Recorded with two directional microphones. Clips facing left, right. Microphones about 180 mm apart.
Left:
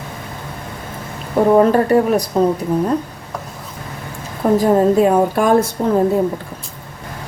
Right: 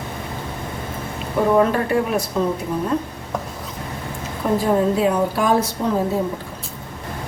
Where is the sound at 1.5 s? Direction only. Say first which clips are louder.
Left 6 dB; 40° left (ahead or behind).